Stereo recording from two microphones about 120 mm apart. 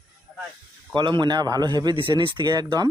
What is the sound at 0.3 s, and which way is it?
Snake, centre (ahead or behind).